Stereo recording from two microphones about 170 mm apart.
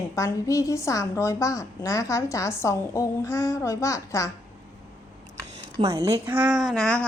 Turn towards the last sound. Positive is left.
turn(degrees=5)  # may be behind; listen again after turning